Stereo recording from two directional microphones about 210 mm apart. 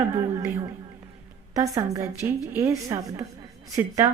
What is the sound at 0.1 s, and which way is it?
Speech, 15° right (ahead or behind).